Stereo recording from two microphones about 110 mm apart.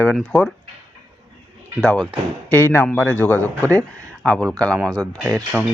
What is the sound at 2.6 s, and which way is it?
A man's voice, 25° left (ahead or behind).